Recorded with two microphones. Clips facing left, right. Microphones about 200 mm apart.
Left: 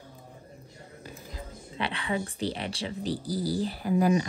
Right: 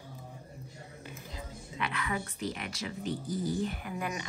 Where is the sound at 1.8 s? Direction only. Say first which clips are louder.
Left 4 dB; 30° left (ahead or behind).